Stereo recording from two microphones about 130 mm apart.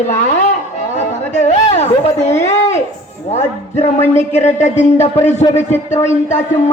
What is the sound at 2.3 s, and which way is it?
Speech, 60° left (ahead or behind).